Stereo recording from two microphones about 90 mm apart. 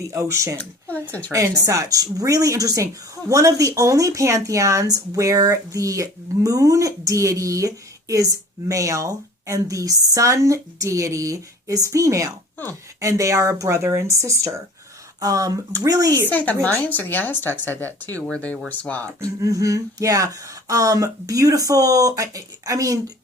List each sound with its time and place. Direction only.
0.0 s a woman's voice: 35° right (ahead or behind)
0.6 s speech: 15° left (ahead or behind)
1.3 s a woman's voice: 40° right (ahead or behind)
16.3 s speech: 15° left (ahead or behind)
19.2 s a woman's voice: 40° right (ahead or behind)